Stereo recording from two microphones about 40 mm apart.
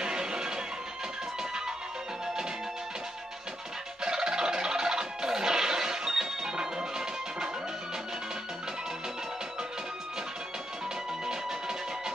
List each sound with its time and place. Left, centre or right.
0.0 s music: centre
4.0 s music: centre